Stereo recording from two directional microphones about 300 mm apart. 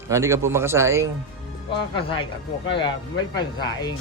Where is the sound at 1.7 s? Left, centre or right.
Centre.